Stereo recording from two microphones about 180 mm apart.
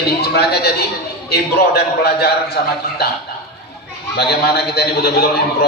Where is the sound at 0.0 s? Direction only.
65° left (ahead or behind).